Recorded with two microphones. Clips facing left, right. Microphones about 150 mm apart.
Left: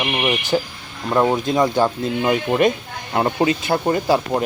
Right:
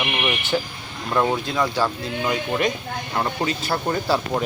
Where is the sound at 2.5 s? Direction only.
30° left (ahead or behind).